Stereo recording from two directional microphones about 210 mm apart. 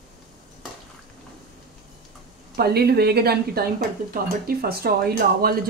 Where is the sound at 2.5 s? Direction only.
50° right (ahead or behind).